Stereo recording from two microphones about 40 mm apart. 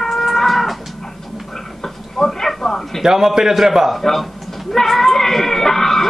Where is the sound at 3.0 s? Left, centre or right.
Centre.